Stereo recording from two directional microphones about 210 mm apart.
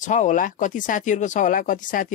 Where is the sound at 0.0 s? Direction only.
35° left (ahead or behind).